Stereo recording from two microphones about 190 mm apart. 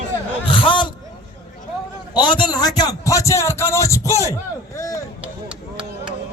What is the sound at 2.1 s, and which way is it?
A man's voice, 25° left (ahead or behind).